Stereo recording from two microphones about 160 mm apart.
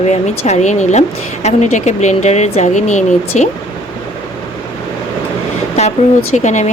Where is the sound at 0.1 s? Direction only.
45° left (ahead or behind).